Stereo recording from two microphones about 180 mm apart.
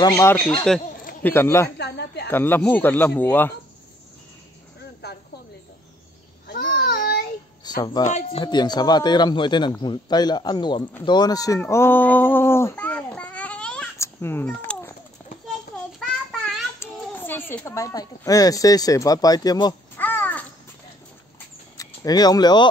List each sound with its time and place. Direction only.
0.0 s speech: 15° left (ahead or behind)
1.8 s speech: 65° left (ahead or behind)
2.2 s speech: 10° left (ahead or behind)
5.0 s snake: 65° left (ahead or behind)
6.4 s babbling: 50° left (ahead or behind)
6.7 s child singing: 65° left (ahead or behind)
7.6 s speech: 25° left (ahead or behind)
8.0 s a man's voice: 35° left (ahead or behind)
11.1 s a sound: 20° left (ahead or behind)
16.0 s child singing: centre (ahead or behind)
16.8 s speech: 10° left (ahead or behind)
20.0 s babbling: 10° left (ahead or behind)
21.7 s speech: 20° left (ahead or behind)